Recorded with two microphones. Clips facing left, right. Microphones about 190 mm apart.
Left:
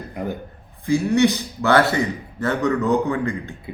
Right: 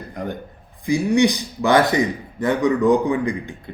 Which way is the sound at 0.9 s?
15° right (ahead or behind).